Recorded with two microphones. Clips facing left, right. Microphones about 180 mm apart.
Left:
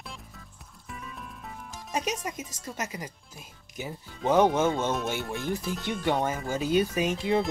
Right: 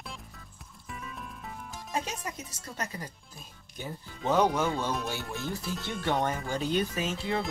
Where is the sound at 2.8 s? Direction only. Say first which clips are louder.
Left 2 dB; 15° left (ahead or behind).